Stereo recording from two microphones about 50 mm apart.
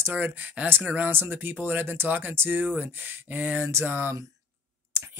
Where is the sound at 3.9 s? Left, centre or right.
Right.